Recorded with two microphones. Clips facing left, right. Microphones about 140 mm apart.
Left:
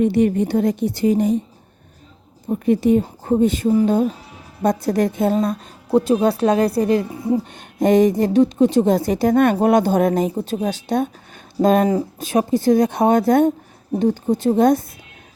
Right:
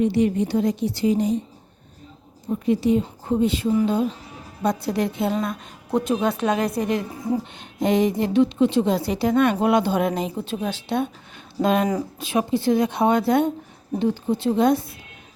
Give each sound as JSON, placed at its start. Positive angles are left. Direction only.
{"t": 0.0, "sound": "a woman's voice", "side_deg": 55}
{"t": 2.5, "sound": "a woman's voice", "side_deg": 50}
{"t": 7.8, "sound": "a woman's voice", "side_deg": 45}